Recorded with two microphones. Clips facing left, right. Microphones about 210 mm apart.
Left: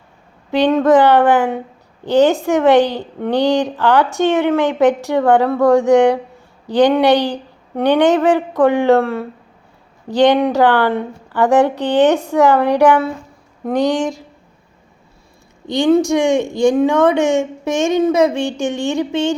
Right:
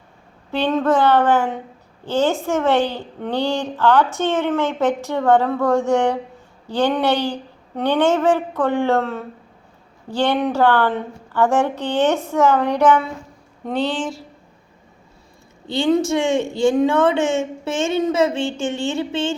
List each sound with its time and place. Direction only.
0.5 s a woman's voice: 15° left (ahead or behind)
15.6 s a woman's voice: 15° left (ahead or behind)